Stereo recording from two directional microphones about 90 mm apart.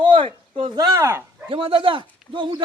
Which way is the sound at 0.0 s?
70° right (ahead or behind).